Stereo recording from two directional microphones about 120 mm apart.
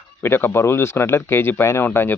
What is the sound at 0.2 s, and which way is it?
Speech, 20° left (ahead or behind).